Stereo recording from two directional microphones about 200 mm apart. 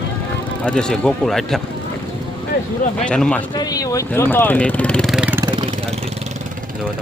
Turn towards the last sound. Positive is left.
turn(degrees=-25)  # may be behind; listen again after turning